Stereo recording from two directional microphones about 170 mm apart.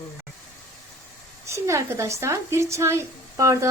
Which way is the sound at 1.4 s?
15° right (ahead or behind).